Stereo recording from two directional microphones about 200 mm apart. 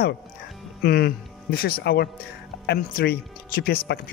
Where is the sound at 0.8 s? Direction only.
50° left (ahead or behind).